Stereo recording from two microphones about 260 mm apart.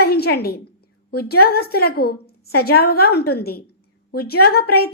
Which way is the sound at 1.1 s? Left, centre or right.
Left.